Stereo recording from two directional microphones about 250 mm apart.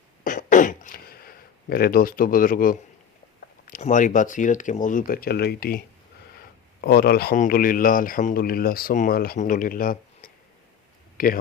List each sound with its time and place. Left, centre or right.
0.3 s throat clearing: left
3.7 s speech: left
6.8 s speech: left